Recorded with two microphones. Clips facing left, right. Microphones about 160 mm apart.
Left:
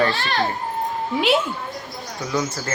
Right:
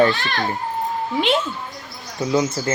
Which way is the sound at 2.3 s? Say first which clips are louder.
Right 5 dB; 20° right (ahead or behind).